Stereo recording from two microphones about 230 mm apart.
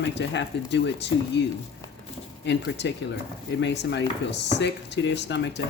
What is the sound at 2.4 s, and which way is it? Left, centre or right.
Speech, left.